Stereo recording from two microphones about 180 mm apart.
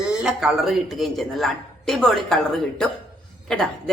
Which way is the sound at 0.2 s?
5° right (ahead or behind).